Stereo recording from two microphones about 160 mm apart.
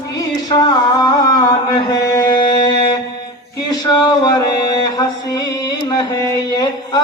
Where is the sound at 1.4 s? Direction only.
25° left (ahead or behind).